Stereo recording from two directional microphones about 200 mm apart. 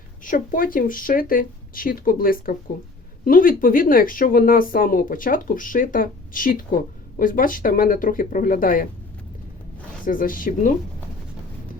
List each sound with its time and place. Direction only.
0.3 s speech: 45° left (ahead or behind)
10.1 s speech: 45° left (ahead or behind)